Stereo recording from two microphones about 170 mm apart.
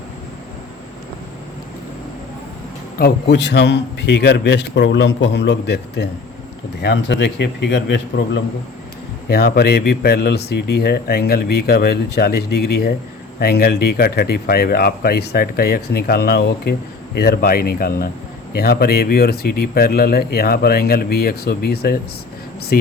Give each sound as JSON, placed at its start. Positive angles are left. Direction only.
{"t": 3.0, "sound": "a man's voice", "side_deg": 90}
{"t": 6.8, "sound": "a man's voice", "side_deg": 90}
{"t": 9.3, "sound": "speech", "side_deg": 70}